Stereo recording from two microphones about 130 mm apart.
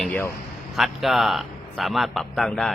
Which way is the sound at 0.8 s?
Centre (ahead or behind).